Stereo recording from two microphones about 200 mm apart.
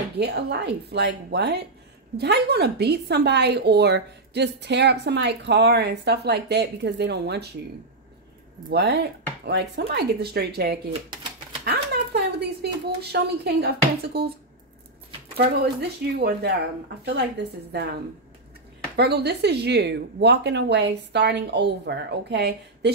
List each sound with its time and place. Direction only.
0.2 s a woman's voice: 55° right (ahead or behind)
8.6 s a woman's voice: 55° right (ahead or behind)
11.6 s a sound: 55° right (ahead or behind)
13.1 s speech: 55° right (ahead or behind)
15.3 s a woman's voice: 55° right (ahead or behind)
18.9 s a woman's voice: 55° right (ahead or behind)